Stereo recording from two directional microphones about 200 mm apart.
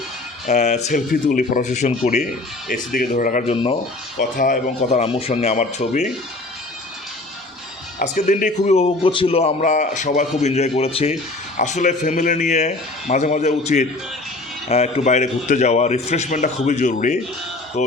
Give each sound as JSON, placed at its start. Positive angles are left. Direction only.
{"t": 0.4, "sound": "a man's voice", "side_deg": 35}
{"t": 2.6, "sound": "a man's voice", "side_deg": 50}
{"t": 3.5, "sound": "speech", "side_deg": 25}
{"t": 4.2, "sound": "a man's voice", "side_deg": 40}
{"t": 7.9, "sound": "a man's voice", "side_deg": 40}